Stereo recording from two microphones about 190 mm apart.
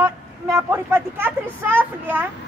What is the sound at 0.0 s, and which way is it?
Speech, 15° right (ahead or behind).